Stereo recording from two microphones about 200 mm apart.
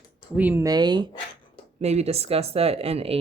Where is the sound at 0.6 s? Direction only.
20° right (ahead or behind).